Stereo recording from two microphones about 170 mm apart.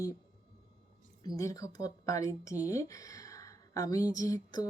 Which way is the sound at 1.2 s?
20° left (ahead or behind).